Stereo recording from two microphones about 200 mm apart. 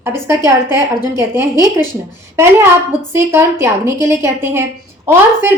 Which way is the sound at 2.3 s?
10° right (ahead or behind).